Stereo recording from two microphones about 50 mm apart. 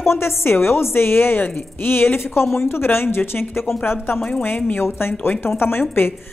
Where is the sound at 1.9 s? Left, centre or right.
Left.